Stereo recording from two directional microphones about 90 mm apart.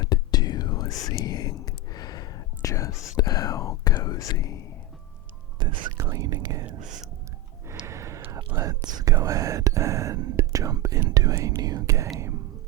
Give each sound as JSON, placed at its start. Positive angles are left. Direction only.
{"t": 0.0, "sound": "whispering", "side_deg": 45}
{"t": 3.9, "sound": "speech", "side_deg": 40}
{"t": 5.5, "sound": "speech", "side_deg": -60}
{"t": 6.0, "sound": "speech", "side_deg": -35}
{"t": 7.9, "sound": "a sound", "side_deg": -35}
{"t": 8.5, "sound": "speech", "side_deg": -45}